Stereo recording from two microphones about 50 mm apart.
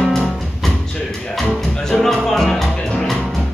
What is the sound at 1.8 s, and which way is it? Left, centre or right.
Music, centre.